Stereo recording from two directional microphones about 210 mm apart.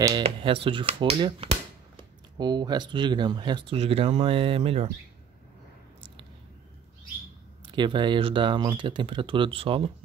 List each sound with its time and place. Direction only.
0.2 s speech: 25° right (ahead or behind)
7.6 s speech: 20° right (ahead or behind)